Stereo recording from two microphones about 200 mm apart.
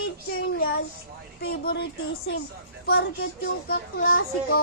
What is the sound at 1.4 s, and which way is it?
Speech, 50° left (ahead or behind).